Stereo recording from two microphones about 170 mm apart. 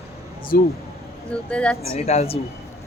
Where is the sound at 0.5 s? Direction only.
60° left (ahead or behind).